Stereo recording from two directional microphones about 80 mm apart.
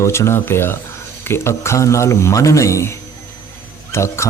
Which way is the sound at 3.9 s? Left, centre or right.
Left.